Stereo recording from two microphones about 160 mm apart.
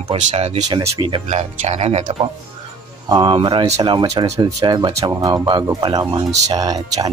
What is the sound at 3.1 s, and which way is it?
Speech, 30° right (ahead or behind).